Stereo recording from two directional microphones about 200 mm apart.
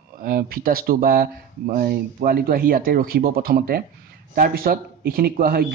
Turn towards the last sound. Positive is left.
turn(degrees=-50)  # may be behind; listen again after turning